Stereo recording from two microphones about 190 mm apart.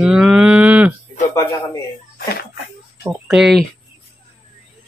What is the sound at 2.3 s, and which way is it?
Speech, 55° left (ahead or behind).